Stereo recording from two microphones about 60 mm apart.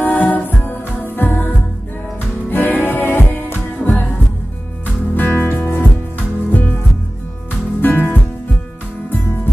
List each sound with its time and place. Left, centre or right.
0.0 s music: left